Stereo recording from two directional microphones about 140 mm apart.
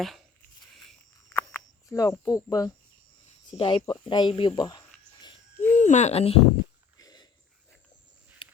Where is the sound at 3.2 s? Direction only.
40° left (ahead or behind).